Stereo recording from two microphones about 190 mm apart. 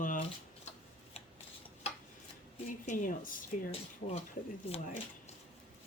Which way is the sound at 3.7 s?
35° left (ahead or behind).